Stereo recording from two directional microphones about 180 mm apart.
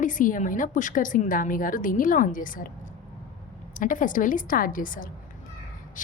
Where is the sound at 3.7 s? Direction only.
45° left (ahead or behind).